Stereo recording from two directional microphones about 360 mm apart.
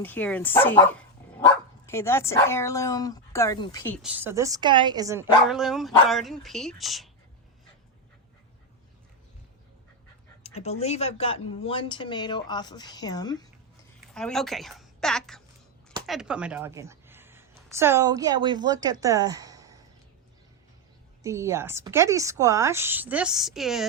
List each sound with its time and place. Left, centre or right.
0.0 s speech: centre
10.4 s a woman's voice: centre
21.2 s speech: centre